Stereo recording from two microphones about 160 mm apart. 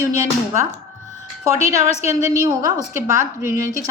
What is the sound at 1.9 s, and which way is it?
Speech, 40° left (ahead or behind).